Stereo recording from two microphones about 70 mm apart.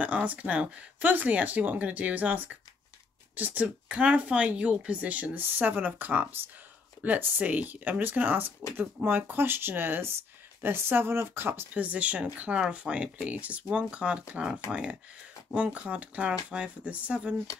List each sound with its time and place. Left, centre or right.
0.0 s speech: right